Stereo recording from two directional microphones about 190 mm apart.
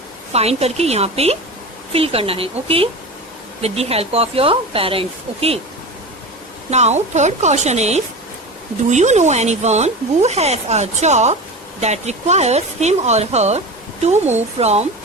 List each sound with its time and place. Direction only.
0.3 s speech: 35° right (ahead or behind)
6.7 s speech: 35° right (ahead or behind)